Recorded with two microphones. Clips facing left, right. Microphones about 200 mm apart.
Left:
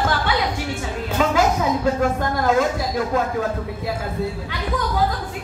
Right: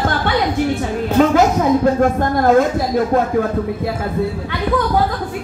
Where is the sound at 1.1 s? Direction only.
50° right (ahead or behind).